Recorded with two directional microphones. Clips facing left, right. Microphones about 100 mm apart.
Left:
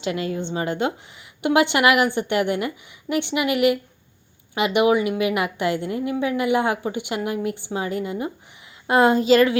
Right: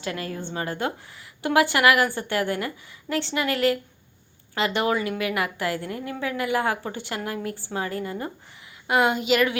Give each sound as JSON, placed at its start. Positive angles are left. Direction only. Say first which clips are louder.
{"t": 0.0, "sound": "a woman's voice", "louder": "left 6 dB", "side_deg": 20}
{"t": 8.9, "sound": "speech", "louder": "left 5 dB", "side_deg": 35}